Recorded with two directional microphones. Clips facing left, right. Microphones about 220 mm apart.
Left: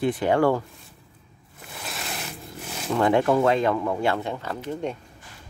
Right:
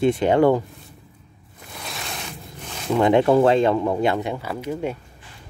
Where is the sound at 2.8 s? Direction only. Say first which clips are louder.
Right 4 dB; 15° right (ahead or behind).